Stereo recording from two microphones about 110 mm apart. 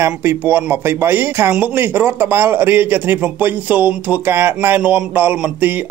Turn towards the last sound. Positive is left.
turn(degrees=-15)  # may be behind; listen again after turning